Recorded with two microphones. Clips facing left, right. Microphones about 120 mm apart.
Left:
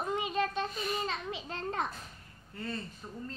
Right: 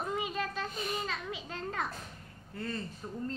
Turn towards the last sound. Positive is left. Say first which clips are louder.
# right 4 dB
turn(degrees=0)  # may be behind; listen again after turning